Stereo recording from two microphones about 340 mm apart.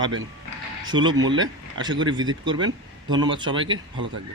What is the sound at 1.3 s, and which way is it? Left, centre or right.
Speech, right.